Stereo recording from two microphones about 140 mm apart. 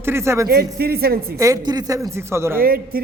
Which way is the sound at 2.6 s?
90° right.